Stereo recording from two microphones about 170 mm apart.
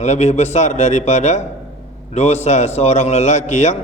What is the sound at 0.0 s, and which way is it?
A man's voice, 40° left (ahead or behind).